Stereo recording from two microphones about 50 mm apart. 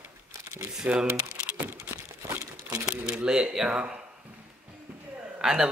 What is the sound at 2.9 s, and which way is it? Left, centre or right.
Speech, centre.